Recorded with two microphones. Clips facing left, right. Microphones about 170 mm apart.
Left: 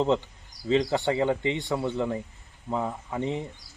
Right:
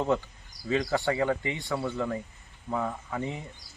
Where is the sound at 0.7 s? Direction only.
20° left (ahead or behind).